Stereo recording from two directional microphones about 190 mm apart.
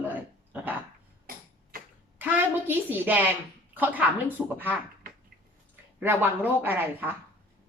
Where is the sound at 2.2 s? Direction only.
10° right (ahead or behind).